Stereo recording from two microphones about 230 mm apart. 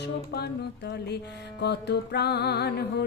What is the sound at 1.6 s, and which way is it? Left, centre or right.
Music, left.